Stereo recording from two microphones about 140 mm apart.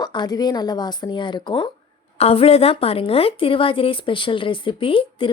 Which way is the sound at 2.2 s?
45° left (ahead or behind).